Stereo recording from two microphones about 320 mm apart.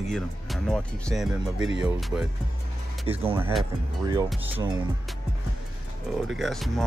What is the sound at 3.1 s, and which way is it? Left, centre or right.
Speech, centre.